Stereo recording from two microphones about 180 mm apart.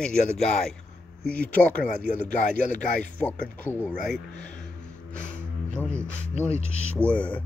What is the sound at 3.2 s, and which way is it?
Speech, 10° left (ahead or behind).